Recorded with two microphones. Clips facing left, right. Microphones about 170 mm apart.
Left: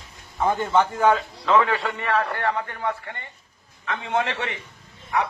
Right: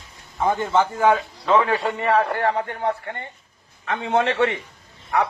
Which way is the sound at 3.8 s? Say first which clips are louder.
Right 4 dB; 50° right (ahead or behind).